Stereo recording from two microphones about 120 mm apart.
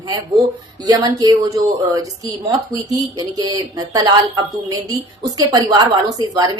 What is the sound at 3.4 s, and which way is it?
A woman's voice, 35° right (ahead or behind).